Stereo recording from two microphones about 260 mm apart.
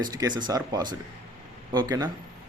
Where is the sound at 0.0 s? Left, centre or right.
Centre.